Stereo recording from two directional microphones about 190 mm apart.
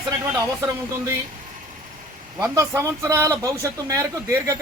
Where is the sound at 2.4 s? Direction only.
15° right (ahead or behind).